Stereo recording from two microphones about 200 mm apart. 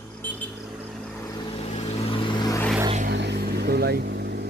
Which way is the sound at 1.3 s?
25° left (ahead or behind).